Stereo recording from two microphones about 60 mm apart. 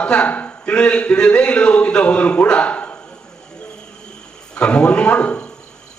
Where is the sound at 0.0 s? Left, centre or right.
Centre.